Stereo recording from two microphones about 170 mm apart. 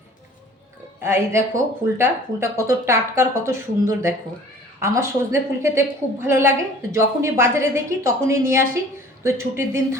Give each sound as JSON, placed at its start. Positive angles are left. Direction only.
{"t": 1.0, "sound": "speech", "side_deg": -15}